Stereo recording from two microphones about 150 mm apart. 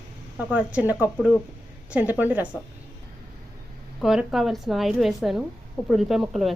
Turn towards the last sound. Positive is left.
turn(degrees=0)  # may be behind; listen again after turning